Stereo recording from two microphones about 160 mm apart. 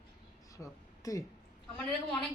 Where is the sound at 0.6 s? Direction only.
20° left (ahead or behind).